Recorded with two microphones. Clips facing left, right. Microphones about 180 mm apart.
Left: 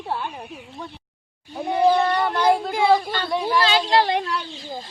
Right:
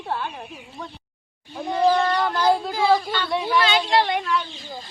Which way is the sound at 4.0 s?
35° left (ahead or behind).